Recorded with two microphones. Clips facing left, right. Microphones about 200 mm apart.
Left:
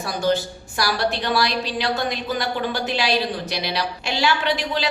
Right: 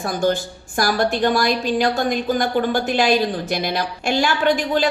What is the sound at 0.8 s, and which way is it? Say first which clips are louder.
A woman's voice: right 5 dB; 50° right (ahead or behind).